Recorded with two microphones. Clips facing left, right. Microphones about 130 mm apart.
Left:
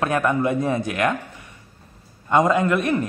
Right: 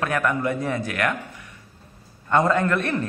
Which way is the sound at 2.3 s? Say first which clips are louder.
Left 2 dB; 15° left (ahead or behind).